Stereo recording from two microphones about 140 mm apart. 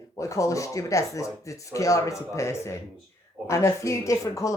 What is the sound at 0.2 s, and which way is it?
Speech, 20° left (ahead or behind).